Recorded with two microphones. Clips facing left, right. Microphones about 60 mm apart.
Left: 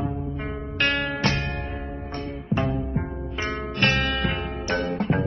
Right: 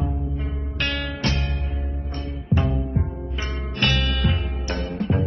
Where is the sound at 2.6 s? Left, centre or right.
Left.